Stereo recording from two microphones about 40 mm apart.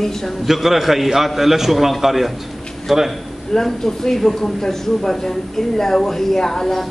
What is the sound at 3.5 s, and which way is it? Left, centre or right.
A man's voice, centre.